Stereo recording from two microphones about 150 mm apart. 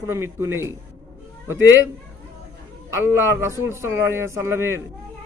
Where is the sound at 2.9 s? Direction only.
15° right (ahead or behind).